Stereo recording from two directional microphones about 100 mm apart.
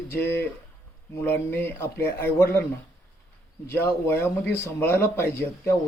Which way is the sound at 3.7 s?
25° left (ahead or behind).